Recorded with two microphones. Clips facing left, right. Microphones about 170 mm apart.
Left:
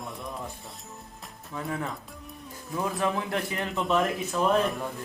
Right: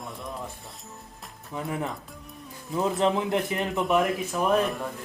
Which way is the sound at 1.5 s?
20° right (ahead or behind).